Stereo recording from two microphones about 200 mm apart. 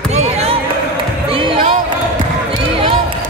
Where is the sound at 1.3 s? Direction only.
25° right (ahead or behind).